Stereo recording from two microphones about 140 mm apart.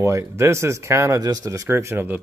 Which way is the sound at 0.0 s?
20° right (ahead or behind).